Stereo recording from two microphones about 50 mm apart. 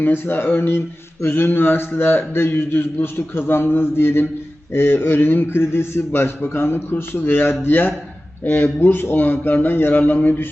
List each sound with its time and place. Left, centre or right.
0.0 s a man's voice: left